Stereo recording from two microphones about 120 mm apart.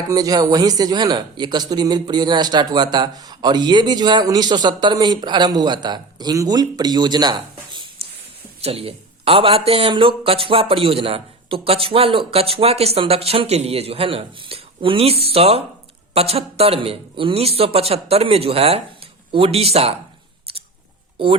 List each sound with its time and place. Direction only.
0.1 s speech: 30° right (ahead or behind)
8.6 s a man's voice: 55° right (ahead or behind)